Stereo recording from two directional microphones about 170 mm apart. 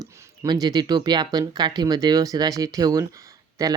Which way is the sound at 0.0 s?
15° right (ahead or behind).